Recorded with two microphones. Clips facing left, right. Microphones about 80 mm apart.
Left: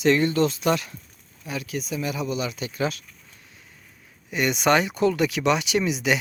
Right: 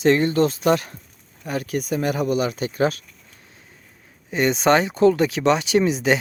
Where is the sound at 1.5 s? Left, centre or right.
Right.